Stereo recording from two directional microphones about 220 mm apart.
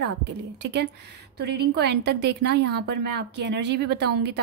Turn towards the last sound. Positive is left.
turn(degrees=-50)  # may be behind; listen again after turning